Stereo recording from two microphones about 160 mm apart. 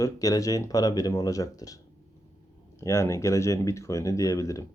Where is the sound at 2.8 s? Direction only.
20° left (ahead or behind).